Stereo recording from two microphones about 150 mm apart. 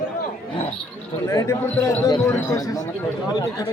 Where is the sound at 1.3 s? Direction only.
20° left (ahead or behind).